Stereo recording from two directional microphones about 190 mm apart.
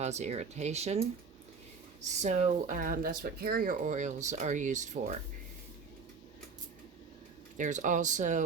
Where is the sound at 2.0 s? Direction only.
35° right (ahead or behind).